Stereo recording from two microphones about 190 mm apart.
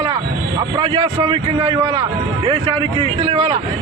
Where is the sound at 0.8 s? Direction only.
25° right (ahead or behind).